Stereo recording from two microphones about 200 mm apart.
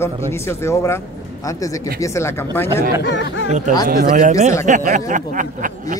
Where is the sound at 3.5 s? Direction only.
35° right (ahead or behind).